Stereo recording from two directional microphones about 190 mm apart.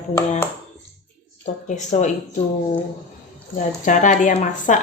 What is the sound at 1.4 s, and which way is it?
Speech, 35° left (ahead or behind).